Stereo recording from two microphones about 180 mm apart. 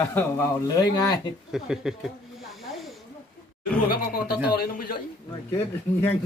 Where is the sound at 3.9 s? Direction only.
60° left (ahead or behind).